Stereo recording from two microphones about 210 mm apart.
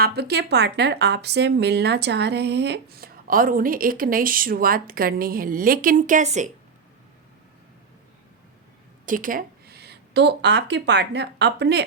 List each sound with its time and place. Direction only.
0.0 s speech: 50° right (ahead or behind); by 6.5 s 35° right (ahead or behind)
9.0 s speech: 40° right (ahead or behind)